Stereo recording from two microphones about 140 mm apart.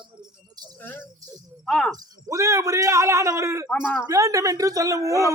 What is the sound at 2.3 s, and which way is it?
A man's voice, 20° right (ahead or behind).